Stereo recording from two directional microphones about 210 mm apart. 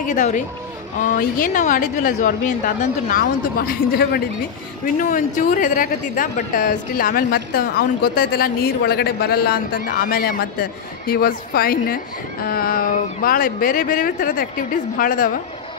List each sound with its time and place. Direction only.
0.1 s a woman's voice: 35° left (ahead or behind)